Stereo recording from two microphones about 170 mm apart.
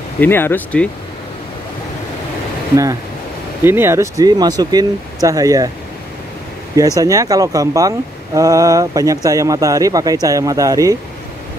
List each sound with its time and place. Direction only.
0.2 s speech: 10° left (ahead or behind)
2.7 s speech: 20° right (ahead or behind)
7.0 s speech: 20° right (ahead or behind)